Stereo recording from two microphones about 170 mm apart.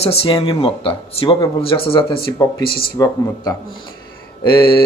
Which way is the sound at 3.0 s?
20° left (ahead or behind).